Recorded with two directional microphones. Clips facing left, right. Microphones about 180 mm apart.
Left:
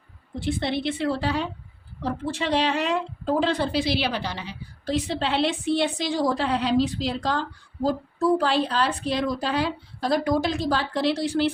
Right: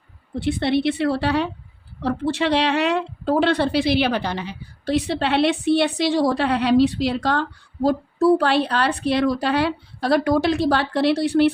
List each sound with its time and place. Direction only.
0.3 s a woman's voice: 65° right (ahead or behind)